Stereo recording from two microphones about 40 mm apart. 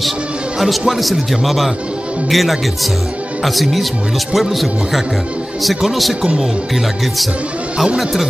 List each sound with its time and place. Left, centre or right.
0.6 s a man's voice: centre
7.7 s speech: centre
8.0 s a man's voice: centre